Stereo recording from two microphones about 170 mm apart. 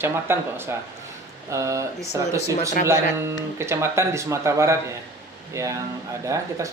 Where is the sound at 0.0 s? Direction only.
15° right (ahead or behind).